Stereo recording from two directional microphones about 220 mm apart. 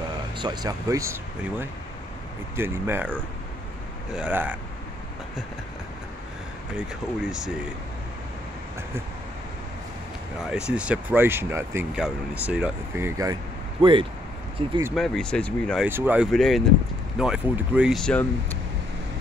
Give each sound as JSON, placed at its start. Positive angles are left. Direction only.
{"t": 0.4, "sound": "speech", "side_deg": -20}
{"t": 2.5, "sound": "speech", "side_deg": -10}
{"t": 7.2, "sound": "speech", "side_deg": -5}
{"t": 10.5, "sound": "speech", "side_deg": -5}
{"t": 15.0, "sound": "speech", "side_deg": 5}
{"t": 15.9, "sound": "speech", "side_deg": -10}